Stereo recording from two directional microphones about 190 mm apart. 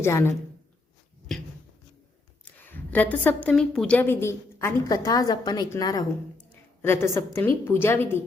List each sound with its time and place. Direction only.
0.0 s a woman's voice: 15° left (ahead or behind)
2.4 s a woman's voice: 10° left (ahead or behind)